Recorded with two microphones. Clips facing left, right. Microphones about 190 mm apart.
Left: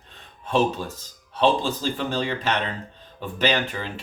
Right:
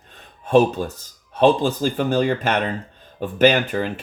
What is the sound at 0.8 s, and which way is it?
Speech, 50° right (ahead or behind).